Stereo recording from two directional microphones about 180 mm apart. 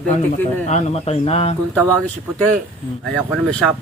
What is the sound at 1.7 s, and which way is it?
Speech, 5° left (ahead or behind).